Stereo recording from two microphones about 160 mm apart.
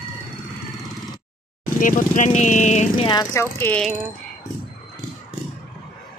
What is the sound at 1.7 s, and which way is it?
Speech, 55° left (ahead or behind).